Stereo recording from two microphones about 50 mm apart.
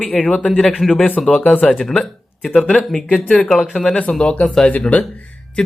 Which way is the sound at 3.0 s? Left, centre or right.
Left.